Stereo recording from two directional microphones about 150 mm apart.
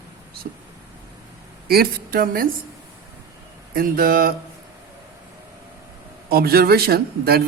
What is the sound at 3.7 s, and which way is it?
Speech, 75° right (ahead or behind).